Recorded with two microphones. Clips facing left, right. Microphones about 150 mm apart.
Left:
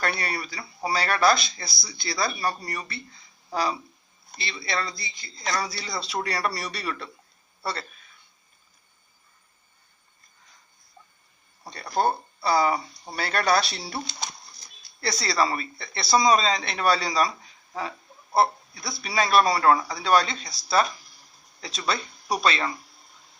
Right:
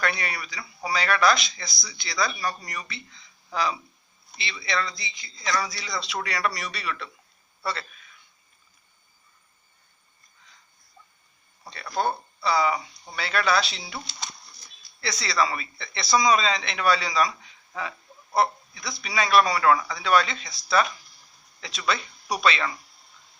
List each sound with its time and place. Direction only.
0.0 s a man's voice: 35° left (ahead or behind)
4.9 s a man's voice: 50° left (ahead or behind)
11.6 s a man's voice: 40° left (ahead or behind)
15.0 s a man's voice: 40° left (ahead or behind)
18.3 s a man's voice: 35° left (ahead or behind)